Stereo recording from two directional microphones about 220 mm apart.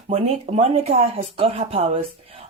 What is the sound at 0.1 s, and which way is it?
Speech, 30° right (ahead or behind).